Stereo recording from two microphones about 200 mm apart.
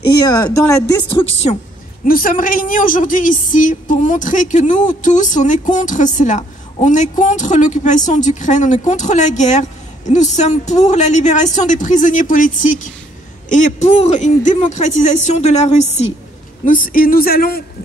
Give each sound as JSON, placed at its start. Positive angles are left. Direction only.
{"t": 1.1, "sound": "speech", "side_deg": 30}
{"t": 2.0, "sound": "a man's voice", "side_deg": 45}